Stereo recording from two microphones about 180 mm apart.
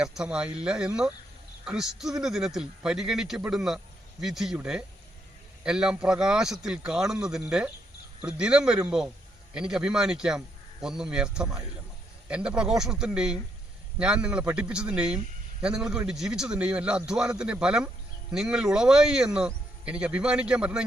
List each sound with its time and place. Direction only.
0.2 s speech: 5° right (ahead or behind)